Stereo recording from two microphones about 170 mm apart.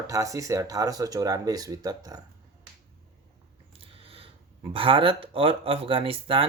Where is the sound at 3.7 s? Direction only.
35° right (ahead or behind).